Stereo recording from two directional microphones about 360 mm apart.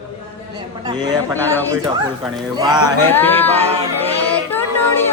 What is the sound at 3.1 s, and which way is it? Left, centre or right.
Speech, centre.